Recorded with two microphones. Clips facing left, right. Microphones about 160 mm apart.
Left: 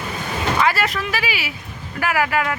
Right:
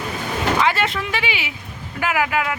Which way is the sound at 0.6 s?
20° right (ahead or behind).